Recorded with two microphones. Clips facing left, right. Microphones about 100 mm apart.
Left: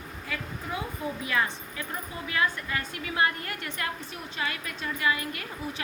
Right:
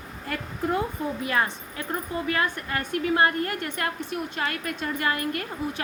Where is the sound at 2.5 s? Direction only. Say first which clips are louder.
Right 5 dB; 60° right (ahead or behind).